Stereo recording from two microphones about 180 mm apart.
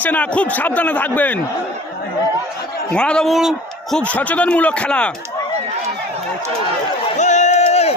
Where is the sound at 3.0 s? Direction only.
5° left (ahead or behind).